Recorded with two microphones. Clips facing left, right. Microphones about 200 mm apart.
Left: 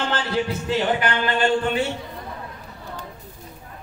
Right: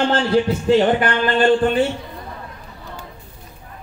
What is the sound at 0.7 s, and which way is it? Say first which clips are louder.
Speech: right 4 dB; 45° right (ahead or behind).